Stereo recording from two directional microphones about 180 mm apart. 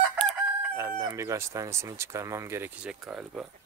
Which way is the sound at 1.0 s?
15° right (ahead or behind).